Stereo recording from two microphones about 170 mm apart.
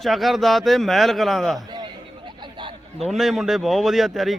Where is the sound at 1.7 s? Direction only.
25° right (ahead or behind).